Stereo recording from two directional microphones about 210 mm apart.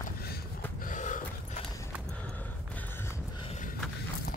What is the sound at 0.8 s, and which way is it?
Snort, 40° left (ahead or behind).